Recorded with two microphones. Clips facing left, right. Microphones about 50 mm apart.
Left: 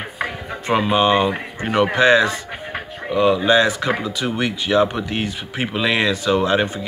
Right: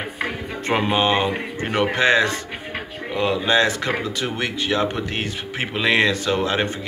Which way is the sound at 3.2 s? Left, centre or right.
Centre.